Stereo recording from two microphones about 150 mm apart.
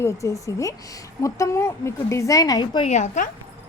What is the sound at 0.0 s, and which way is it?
A woman's voice, 20° left (ahead or behind).